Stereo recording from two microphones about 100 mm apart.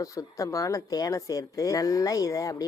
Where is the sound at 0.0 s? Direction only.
35° left (ahead or behind).